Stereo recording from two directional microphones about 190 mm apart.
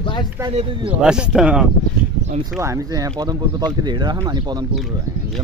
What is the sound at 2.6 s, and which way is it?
Speech, 15° right (ahead or behind).